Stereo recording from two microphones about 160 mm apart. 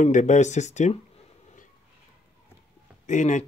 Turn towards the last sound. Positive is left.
turn(degrees=50)  # may be behind; listen again after turning